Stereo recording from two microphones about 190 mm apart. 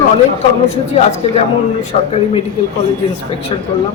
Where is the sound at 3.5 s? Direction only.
30° left (ahead or behind).